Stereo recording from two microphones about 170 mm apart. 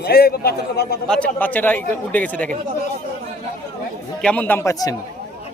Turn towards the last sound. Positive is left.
turn(degrees=15)  # may be behind; listen again after turning